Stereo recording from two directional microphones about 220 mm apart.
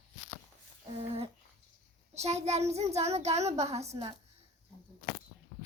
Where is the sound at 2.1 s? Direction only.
30° right (ahead or behind).